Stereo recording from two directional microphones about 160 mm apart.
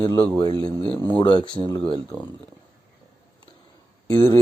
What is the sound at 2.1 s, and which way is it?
Speech, 5° left (ahead or behind).